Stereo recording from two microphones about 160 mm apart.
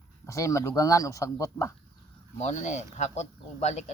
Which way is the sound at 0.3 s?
20° left (ahead or behind).